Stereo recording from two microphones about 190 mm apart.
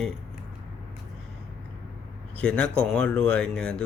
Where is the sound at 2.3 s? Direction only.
5° left (ahead or behind).